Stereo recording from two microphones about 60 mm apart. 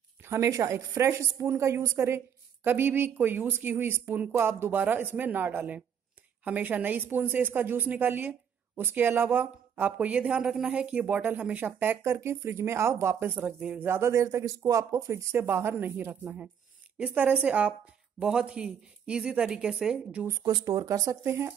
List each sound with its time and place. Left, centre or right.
0.2 s a sound: right
0.5 s a woman's voice: right
2.6 s a woman's voice: right
12.0 s speech: right
13.1 s speech: right
13.5 s speech: centre
13.7 s speech: right
14.1 s a woman's voice: right
15.4 s a woman's voice: right; by 20.2 s centre
20.6 s speech: right
21.2 s speech: right